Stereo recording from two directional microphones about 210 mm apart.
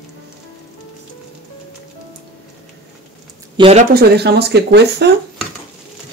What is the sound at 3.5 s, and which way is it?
Speech, 25° right (ahead or behind).